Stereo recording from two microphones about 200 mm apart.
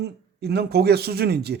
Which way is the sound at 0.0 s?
55° right (ahead or behind).